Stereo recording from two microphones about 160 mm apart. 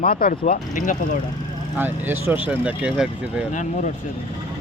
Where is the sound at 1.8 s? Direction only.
10° right (ahead or behind).